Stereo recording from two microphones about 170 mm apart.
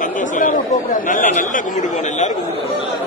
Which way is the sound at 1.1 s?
50° left (ahead or behind).